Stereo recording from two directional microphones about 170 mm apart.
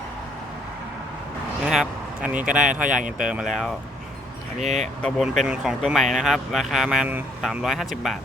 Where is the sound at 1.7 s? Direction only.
5° right (ahead or behind).